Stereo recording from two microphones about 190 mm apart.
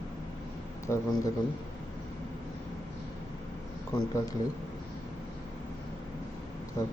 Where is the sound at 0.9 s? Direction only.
15° left (ahead or behind).